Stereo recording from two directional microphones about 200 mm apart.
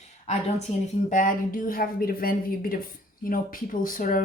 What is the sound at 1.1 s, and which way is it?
Speech, 40° left (ahead or behind).